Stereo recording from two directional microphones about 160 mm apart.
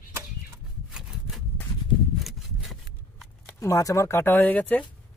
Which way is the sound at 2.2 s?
Centre (ahead or behind).